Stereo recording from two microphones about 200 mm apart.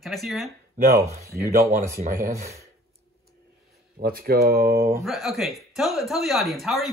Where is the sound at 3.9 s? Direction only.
45° right (ahead or behind).